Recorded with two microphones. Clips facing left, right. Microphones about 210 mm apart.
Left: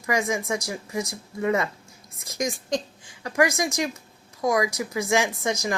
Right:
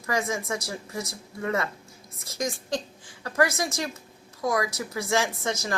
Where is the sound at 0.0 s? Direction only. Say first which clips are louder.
Left 3 dB; 15° left (ahead or behind).